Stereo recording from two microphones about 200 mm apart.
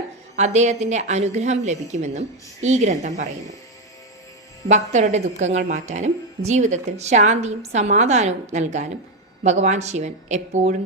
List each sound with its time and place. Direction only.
0.3 s a woman's voice: 35° right (ahead or behind)
4.7 s a woman's voice: 35° right (ahead or behind)